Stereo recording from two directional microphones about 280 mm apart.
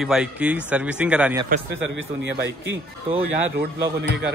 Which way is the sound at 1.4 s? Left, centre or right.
Right.